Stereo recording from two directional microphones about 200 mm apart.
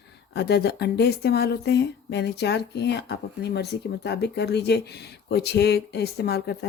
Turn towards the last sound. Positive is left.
turn(degrees=55)  # may be behind; listen again after turning